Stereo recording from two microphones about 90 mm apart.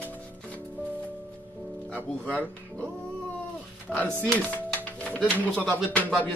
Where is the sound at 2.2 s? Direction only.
15° left (ahead or behind).